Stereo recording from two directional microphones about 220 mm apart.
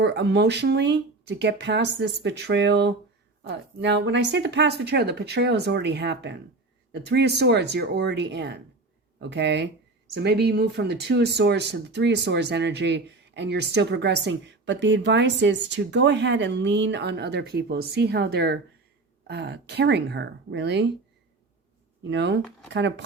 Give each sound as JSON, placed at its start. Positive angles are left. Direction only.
{"t": 0.0, "sound": "speech", "side_deg": -50}
{"t": 22.1, "sound": "speech", "side_deg": -55}